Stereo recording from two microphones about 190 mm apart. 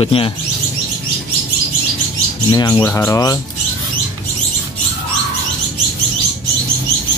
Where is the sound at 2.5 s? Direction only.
20° left (ahead or behind).